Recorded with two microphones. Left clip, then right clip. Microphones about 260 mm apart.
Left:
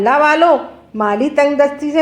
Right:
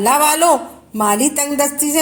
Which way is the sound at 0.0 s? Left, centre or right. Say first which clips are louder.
Left 2 dB; right.